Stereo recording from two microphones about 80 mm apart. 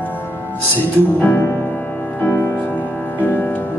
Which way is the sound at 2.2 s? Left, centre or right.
Left.